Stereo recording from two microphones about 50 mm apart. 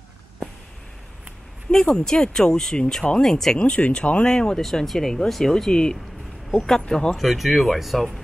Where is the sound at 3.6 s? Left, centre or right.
Left.